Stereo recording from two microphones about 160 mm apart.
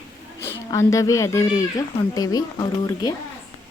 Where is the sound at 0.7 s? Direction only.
20° left (ahead or behind).